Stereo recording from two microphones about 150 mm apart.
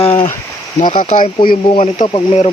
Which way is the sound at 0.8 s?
35° left (ahead or behind).